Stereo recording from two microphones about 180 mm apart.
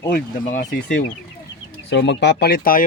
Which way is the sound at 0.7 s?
65° left (ahead or behind).